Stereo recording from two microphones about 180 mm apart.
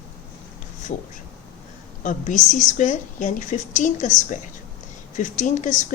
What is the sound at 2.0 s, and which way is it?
A woman's voice, 45° left (ahead or behind).